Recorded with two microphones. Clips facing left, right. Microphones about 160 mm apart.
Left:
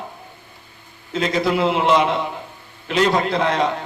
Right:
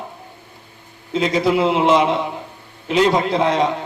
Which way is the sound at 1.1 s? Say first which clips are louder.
Right 3 dB; 15° right (ahead or behind).